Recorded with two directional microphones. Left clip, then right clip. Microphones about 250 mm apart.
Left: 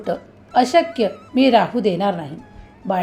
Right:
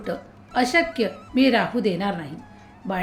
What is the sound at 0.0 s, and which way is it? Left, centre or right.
A woman's voice, centre.